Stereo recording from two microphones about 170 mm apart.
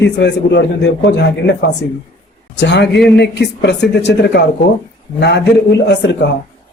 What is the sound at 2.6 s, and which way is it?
A man's voice, 85° left.